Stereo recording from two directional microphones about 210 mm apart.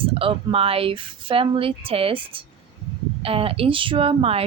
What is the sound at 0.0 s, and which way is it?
Speech, 25° right (ahead or behind).